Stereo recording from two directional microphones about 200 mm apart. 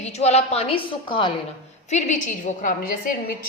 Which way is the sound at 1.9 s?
35° left (ahead or behind).